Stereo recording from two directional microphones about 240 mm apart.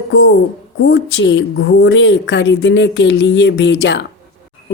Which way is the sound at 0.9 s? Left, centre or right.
Left.